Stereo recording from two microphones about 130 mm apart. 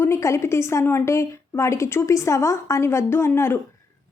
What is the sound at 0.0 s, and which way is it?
A woman's voice, 20° left (ahead or behind).